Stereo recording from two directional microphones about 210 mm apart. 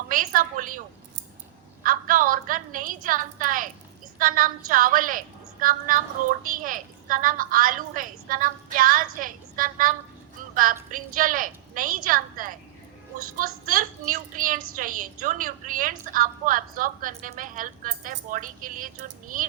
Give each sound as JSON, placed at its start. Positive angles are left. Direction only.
{"t": 0.1, "sound": "a woman's voice", "side_deg": -40}
{"t": 1.8, "sound": "a woman's voice", "side_deg": -40}
{"t": 10.5, "sound": "music", "side_deg": -40}
{"t": 10.9, "sound": "a woman's voice", "side_deg": -40}